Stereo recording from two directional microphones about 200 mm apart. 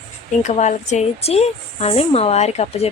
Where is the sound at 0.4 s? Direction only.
35° left (ahead or behind).